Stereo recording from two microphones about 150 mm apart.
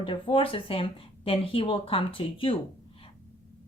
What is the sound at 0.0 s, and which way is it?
A woman's voice, 35° left (ahead or behind).